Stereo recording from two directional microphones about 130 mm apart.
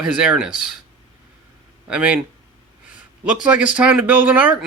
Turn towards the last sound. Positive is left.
turn(degrees=-10)  # may be behind; listen again after turning